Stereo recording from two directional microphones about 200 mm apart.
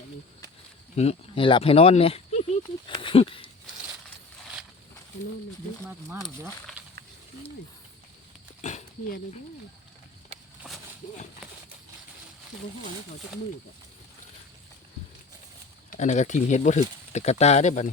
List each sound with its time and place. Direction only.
0.9 s speech: 30° left (ahead or behind)
6.2 s speech: centre (ahead or behind)
8.6 s speech: 40° left (ahead or behind)
15.9 s speech: 35° left (ahead or behind)